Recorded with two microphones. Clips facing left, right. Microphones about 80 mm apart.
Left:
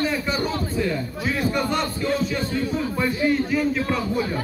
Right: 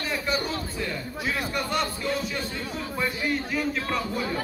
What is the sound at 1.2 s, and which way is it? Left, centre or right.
A man's voice, centre.